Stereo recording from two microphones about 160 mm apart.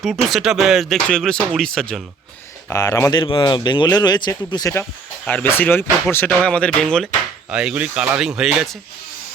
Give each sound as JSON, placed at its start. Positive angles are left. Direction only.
{"t": 0.0, "sound": "speech", "side_deg": 0}
{"t": 2.6, "sound": "speech", "side_deg": 20}
{"t": 3.2, "sound": "speech", "side_deg": 30}
{"t": 7.5, "sound": "speech", "side_deg": -5}